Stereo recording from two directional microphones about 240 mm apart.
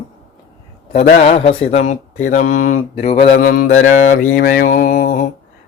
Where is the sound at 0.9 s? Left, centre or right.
Left.